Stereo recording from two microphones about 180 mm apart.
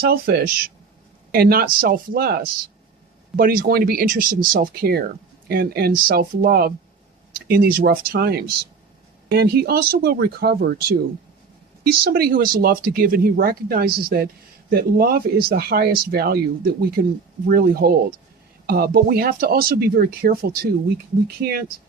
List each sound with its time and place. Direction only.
0.0 s speech: 55° right (ahead or behind)